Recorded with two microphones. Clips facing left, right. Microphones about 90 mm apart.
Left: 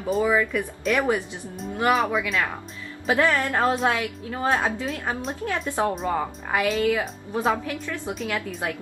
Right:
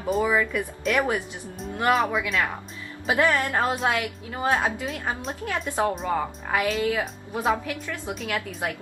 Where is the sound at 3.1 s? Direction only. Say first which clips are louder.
Even; 15° right (ahead or behind).